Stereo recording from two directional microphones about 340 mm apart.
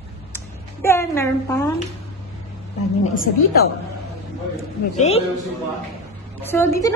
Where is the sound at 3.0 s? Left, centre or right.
Left.